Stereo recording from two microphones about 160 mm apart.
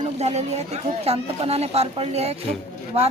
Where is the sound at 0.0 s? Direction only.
40° right (ahead or behind).